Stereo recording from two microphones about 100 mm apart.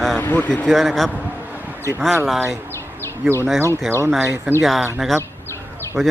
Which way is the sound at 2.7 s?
25° left (ahead or behind).